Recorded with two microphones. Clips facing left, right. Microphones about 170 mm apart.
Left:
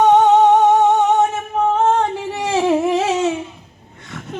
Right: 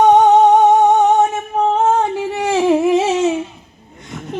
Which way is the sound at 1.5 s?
15° right (ahead or behind).